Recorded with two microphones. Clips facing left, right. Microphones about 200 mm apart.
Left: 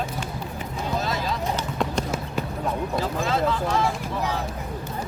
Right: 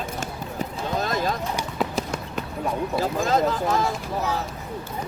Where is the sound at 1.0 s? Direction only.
50° right (ahead or behind).